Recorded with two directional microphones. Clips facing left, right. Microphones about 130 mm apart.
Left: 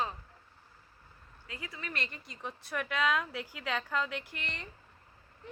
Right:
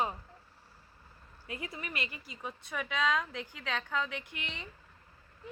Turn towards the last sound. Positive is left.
turn(degrees=0)  # may be behind; listen again after turning